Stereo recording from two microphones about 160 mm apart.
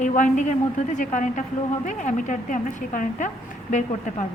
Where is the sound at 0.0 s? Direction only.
50° left (ahead or behind).